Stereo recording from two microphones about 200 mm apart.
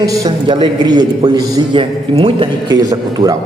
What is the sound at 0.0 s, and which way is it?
A man's voice, 15° right (ahead or behind).